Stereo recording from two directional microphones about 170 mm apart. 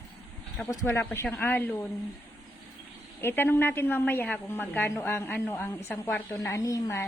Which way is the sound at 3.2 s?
15° left (ahead or behind).